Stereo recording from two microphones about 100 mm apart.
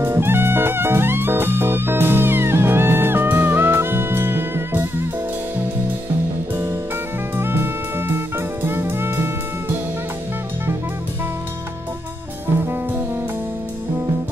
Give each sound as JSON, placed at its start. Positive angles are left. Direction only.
{"t": 0.0, "sound": "music", "side_deg": -25}
{"t": 6.5, "sound": "music", "side_deg": -25}